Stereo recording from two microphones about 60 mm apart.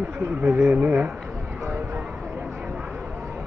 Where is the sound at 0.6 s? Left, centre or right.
Right.